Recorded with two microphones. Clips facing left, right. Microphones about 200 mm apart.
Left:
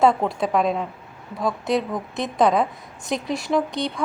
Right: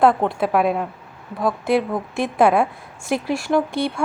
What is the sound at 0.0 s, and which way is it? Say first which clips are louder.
A woman's voice: right 2 dB; centre (ahead or behind).